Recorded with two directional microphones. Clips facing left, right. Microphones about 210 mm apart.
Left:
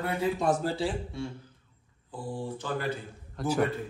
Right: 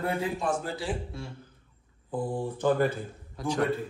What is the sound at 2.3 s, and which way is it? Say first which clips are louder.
Speech: right 7 dB; 55° right (ahead or behind).